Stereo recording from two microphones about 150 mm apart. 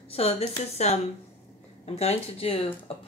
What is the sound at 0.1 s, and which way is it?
Speech, 45° left (ahead or behind).